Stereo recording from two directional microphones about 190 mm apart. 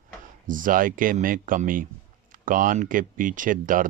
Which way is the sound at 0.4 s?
45° right (ahead or behind).